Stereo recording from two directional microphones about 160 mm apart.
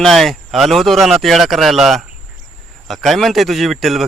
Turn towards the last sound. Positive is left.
turn(degrees=0)  # may be behind; listen again after turning